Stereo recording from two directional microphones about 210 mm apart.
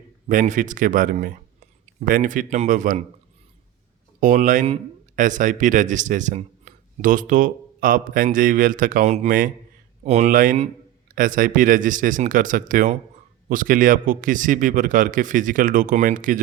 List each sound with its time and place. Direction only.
0.3 s speech: 40° right (ahead or behind)
4.2 s speech: 40° right (ahead or behind)